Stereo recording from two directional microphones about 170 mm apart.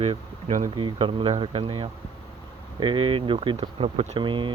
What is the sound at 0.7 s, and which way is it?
Speech, 30° right (ahead or behind).